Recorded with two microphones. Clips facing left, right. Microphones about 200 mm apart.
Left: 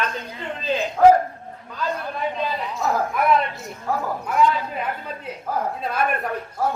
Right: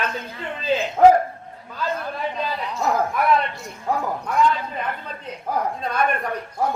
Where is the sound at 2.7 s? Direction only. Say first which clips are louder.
Right 3 dB; centre (ahead or behind).